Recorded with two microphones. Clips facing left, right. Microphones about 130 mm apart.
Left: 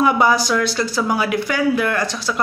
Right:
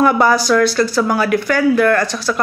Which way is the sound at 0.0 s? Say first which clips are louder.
Right 3 dB; 15° left (ahead or behind).